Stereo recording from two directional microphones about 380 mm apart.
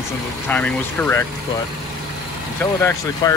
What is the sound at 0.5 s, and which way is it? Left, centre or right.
Speech, centre.